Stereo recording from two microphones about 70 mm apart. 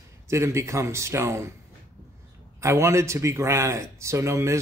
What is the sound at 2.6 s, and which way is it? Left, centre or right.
A man's voice, right.